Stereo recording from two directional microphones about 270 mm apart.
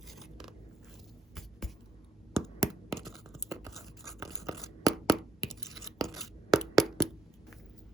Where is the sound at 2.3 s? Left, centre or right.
Centre.